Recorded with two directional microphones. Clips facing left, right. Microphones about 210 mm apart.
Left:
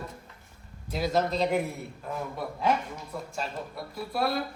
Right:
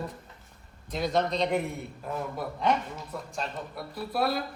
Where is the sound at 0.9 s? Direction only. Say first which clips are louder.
Even; 5° left (ahead or behind).